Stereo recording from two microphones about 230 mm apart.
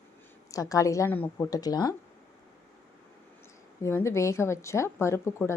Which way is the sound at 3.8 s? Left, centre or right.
Centre.